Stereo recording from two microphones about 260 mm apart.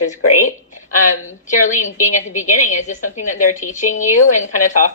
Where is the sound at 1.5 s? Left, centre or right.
Left.